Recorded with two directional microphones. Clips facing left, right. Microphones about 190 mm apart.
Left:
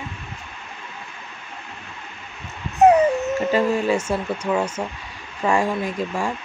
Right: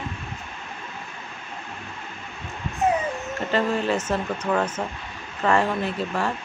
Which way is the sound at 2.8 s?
75° left (ahead or behind).